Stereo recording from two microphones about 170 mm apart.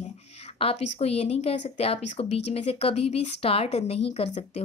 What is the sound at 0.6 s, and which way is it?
A woman's voice, 35° left (ahead or behind).